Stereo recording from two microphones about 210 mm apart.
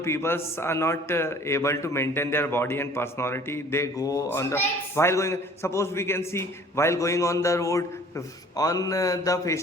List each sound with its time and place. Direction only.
0.0 s a man's voice: 10° left (ahead or behind)